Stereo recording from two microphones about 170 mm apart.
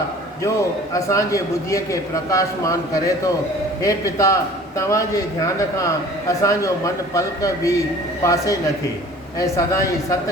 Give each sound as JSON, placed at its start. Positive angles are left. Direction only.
{"t": 0.9, "sound": "a man's voice", "side_deg": 20}
{"t": 3.8, "sound": "a man's voice", "side_deg": 20}